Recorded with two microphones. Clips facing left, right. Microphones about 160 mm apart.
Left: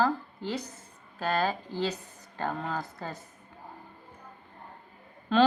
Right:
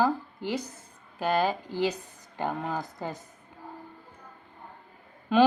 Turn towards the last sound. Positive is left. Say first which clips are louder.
# right 2 dB
turn(degrees=-10)  # may be behind; listen again after turning